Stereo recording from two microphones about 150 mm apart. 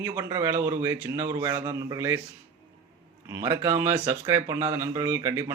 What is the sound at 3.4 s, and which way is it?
Speech, 15° right (ahead or behind).